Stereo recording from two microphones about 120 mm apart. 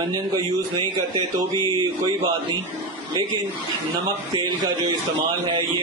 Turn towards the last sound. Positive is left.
turn(degrees=-35)  # may be behind; listen again after turning